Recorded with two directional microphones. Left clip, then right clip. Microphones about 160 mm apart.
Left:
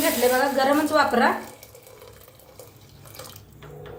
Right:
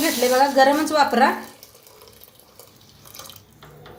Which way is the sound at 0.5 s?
55° right (ahead or behind).